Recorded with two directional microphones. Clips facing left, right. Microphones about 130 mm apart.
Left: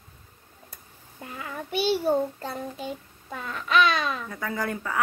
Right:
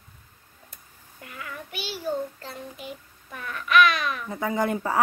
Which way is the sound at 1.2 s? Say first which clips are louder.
Left 3 dB; 25° left (ahead or behind).